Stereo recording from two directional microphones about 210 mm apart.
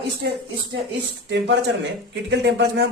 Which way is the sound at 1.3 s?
55° right (ahead or behind).